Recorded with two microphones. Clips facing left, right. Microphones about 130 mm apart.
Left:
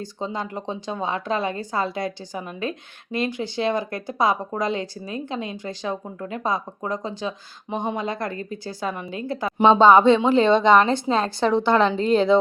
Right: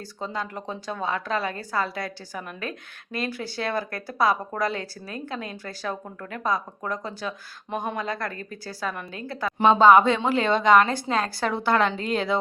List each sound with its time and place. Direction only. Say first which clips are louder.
0.3 s a woman's voice: left 3 dB; 25° left (ahead or behind)